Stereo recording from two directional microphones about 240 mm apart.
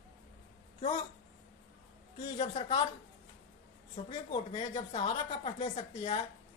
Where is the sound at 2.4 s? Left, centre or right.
Left.